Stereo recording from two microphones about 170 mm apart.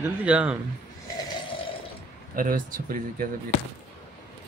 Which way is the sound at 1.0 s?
25° left (ahead or behind).